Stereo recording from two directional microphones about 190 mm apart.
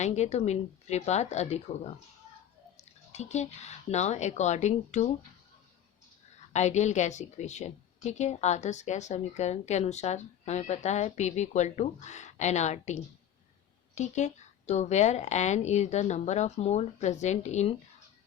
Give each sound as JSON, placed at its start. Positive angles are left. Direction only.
{"t": 0.0, "sound": "a woman's voice", "side_deg": 35}
{"t": 6.5, "sound": "a woman's voice", "side_deg": 35}